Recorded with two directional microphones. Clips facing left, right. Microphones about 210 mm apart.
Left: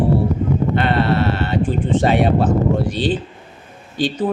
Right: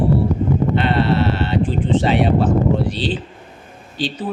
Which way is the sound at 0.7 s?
50° left (ahead or behind).